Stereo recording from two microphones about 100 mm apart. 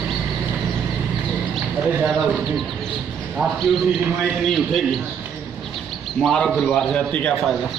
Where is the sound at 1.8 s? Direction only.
5° right (ahead or behind).